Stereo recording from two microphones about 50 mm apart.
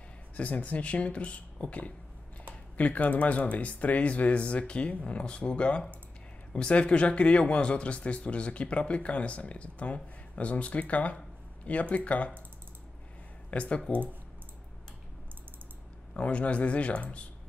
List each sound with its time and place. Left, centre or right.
0.4 s speech: left
13.5 s speech: left
16.1 s speech: left